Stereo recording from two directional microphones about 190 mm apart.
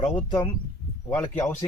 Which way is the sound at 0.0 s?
25° left (ahead or behind).